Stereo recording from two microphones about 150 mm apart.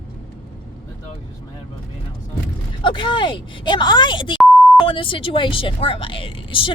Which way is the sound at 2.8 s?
30° left (ahead or behind).